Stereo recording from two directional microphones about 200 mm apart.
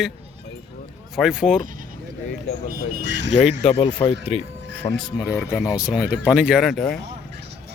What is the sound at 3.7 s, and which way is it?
Speech, 25° left (ahead or behind).